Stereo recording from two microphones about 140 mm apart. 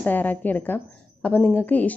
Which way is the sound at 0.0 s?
10° left (ahead or behind).